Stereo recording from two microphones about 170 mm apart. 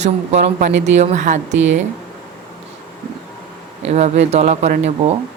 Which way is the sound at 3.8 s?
40° right (ahead or behind).